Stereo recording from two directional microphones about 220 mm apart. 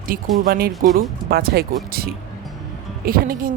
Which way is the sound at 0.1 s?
40° right (ahead or behind).